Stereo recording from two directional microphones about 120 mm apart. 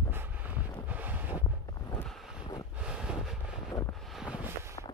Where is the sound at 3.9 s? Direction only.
Centre (ahead or behind).